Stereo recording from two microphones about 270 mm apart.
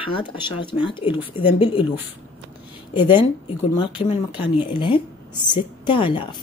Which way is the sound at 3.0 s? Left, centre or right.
Centre.